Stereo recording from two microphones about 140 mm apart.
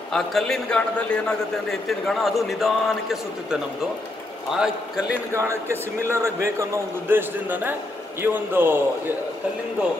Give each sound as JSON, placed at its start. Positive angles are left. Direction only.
{"t": 0.1, "sound": "a man's voice", "side_deg": 0}
{"t": 5.3, "sound": "a man's voice", "side_deg": -20}